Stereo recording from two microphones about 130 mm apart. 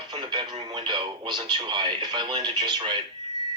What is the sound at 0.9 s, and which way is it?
Speech, 35° right (ahead or behind).